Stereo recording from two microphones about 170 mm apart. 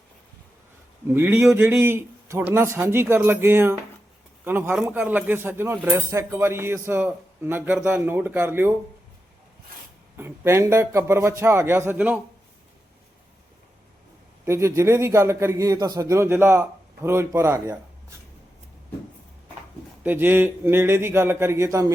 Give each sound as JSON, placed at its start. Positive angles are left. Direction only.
{"t": 1.1, "sound": "speech", "side_deg": -15}
{"t": 10.2, "sound": "speech", "side_deg": -15}
{"t": 14.4, "sound": "speech", "side_deg": -15}
{"t": 20.0, "sound": "speech", "side_deg": -10}